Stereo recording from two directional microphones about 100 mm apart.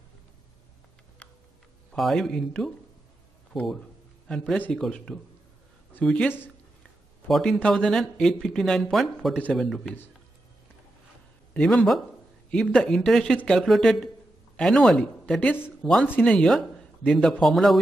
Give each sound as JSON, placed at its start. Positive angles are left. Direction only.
{"t": 1.2, "sound": "tick-tock", "side_deg": 10}
{"t": 1.9, "sound": "speech", "side_deg": 0}
{"t": 4.6, "sound": "speech", "side_deg": 10}
{"t": 6.2, "sound": "speech", "side_deg": 20}
{"t": 7.2, "sound": "speech", "side_deg": 0}
{"t": 11.5, "sound": "speech", "side_deg": 5}